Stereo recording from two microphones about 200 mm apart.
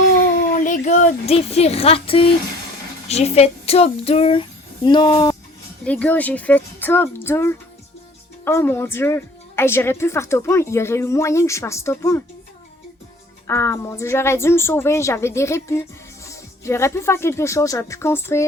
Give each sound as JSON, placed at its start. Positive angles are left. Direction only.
{"t": 0.5, "sound": "speech", "side_deg": 40}
{"t": 5.8, "sound": "a woman's voice", "side_deg": 5}
{"t": 13.5, "sound": "a woman's voice", "side_deg": 10}